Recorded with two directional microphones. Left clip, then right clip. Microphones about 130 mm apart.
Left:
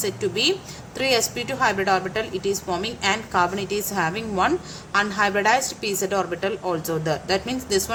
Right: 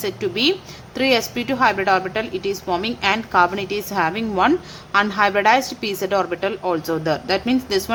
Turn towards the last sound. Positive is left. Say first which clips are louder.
# right 3 dB
turn(degrees=-35)  # may be behind; listen again after turning